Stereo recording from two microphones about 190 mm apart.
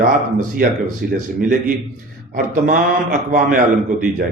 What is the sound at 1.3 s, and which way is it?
A man's voice, 45° right (ahead or behind).